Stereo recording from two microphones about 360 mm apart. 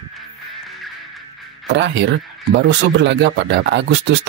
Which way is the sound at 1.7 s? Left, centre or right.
Right.